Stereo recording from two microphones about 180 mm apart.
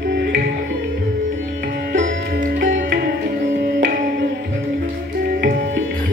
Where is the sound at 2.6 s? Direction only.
90° right.